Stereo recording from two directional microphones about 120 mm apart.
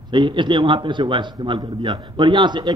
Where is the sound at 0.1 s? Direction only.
40° right (ahead or behind).